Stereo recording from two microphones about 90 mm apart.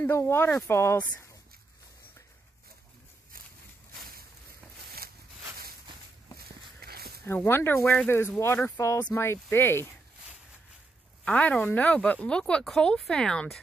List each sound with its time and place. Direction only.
0.1 s speech: 25° left (ahead or behind)
7.2 s speech: 25° left (ahead or behind)
11.2 s speech: 15° left (ahead or behind)